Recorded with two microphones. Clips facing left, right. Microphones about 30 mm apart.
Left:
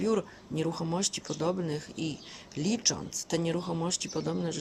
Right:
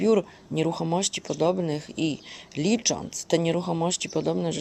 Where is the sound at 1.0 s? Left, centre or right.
Right.